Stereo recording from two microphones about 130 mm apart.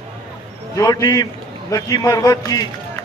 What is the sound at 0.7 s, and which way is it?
Speech, 30° left (ahead or behind).